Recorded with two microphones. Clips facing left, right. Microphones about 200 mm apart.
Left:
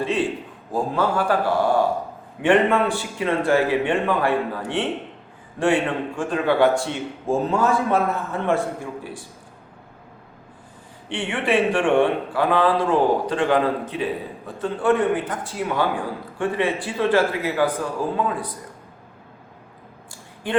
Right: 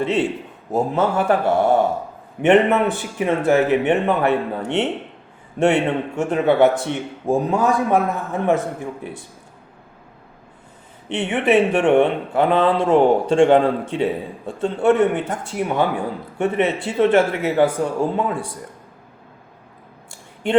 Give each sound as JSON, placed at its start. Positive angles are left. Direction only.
{"t": 0.0, "sound": "speech", "side_deg": -25}
{"t": 11.1, "sound": "speech", "side_deg": -20}
{"t": 20.1, "sound": "a sound", "side_deg": -25}